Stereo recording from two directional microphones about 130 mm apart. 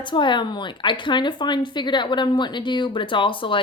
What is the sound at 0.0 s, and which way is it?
A woman's voice, 40° left (ahead or behind).